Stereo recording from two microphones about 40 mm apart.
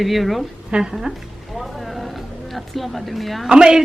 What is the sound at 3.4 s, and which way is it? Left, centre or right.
Speech, centre.